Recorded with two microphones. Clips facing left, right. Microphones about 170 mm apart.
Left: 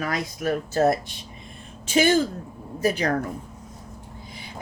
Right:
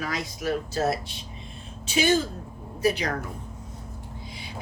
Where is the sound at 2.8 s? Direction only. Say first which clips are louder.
Left 1 dB; 45° left (ahead or behind).